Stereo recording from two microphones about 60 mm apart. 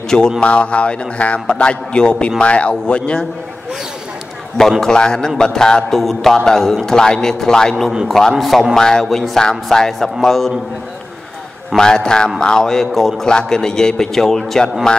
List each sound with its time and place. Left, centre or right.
0.4 s speech: centre
4.6 s a man's voice: centre
11.7 s a man's voice: centre